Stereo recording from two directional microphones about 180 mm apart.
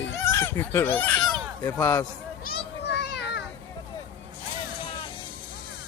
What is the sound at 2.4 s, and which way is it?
Children playing, 70° left (ahead or behind).